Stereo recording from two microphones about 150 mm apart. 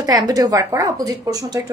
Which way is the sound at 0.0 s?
25° right (ahead or behind).